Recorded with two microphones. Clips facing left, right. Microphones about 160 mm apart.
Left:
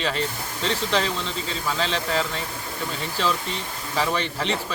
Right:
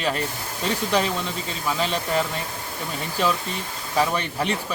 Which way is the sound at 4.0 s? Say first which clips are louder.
Right 2 dB; 10° right (ahead or behind).